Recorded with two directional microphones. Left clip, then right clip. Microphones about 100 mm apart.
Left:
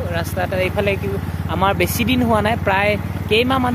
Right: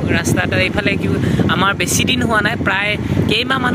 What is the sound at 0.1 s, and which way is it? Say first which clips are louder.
Speech: right 6 dB; 20° left (ahead or behind).